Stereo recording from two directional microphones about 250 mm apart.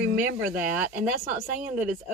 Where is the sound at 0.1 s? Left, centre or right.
Right.